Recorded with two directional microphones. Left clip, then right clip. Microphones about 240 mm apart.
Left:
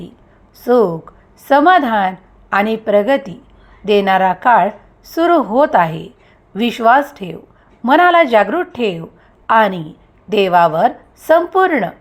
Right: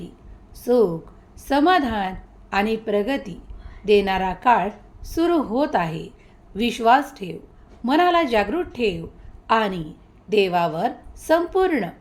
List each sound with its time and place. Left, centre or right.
0.6 s a woman's voice: centre